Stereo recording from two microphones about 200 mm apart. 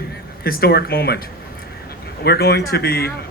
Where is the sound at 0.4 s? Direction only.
50° left (ahead or behind).